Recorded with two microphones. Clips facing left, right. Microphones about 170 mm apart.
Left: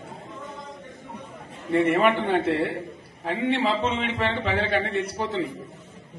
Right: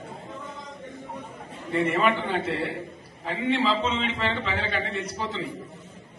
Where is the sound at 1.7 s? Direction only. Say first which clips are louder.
Left 3 dB; 60° left (ahead or behind).